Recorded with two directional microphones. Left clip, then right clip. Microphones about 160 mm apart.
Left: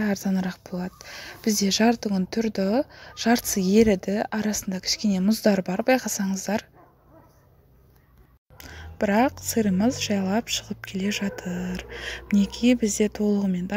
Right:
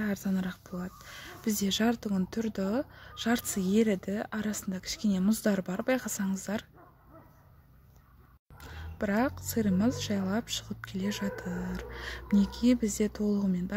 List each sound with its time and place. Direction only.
0.0 s speech: 25° left (ahead or behind)
8.5 s speech: 20° left (ahead or behind)